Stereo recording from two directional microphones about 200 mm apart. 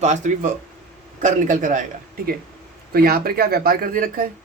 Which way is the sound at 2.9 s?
50° right (ahead or behind).